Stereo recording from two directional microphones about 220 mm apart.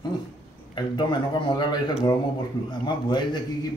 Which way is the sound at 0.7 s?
20° left (ahead or behind).